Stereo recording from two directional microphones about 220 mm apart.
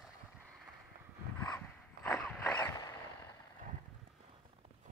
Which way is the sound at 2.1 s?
5° left (ahead or behind).